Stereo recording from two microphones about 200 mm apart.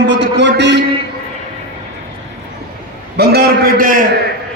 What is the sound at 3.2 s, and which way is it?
A man's voice, 50° right (ahead or behind).